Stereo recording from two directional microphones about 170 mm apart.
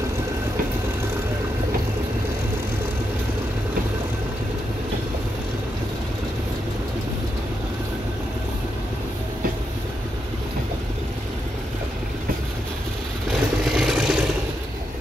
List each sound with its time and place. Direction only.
13.3 s vehicle: 5° right (ahead or behind)